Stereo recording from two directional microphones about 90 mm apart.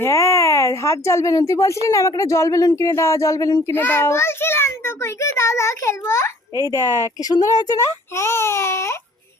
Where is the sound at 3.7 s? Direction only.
25° left (ahead or behind).